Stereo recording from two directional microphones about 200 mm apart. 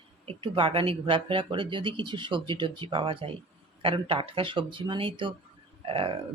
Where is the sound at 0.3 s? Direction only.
25° right (ahead or behind).